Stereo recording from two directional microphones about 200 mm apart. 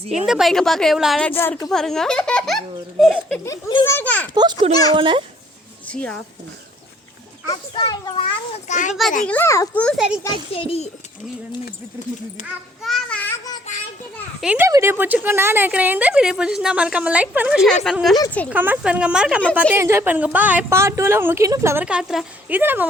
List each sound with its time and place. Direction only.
0.1 s a woman's voice: 5° right (ahead or behind)
3.4 s a child's voice: 20° left (ahead or behind)
3.9 s a child's voice: 10° left (ahead or behind)
4.4 s a child's voice: 20° right (ahead or behind)
5.9 s a woman's voice: 5° left (ahead or behind)
7.4 s a child's voice: 20° left (ahead or behind); by 9.0 s 40° left (ahead or behind)
9.2 s a child's voice: 10° left (ahead or behind)
10.5 s a child's voice: 30° left (ahead or behind)
12.4 s a child's voice: 35° left (ahead or behind)
12.8 s a sound: 5° left (ahead or behind)
14.4 s a woman's voice: 10° right (ahead or behind); by 18.5 s 5° left (ahead or behind)
18.5 s a woman's voice: 10° right (ahead or behind)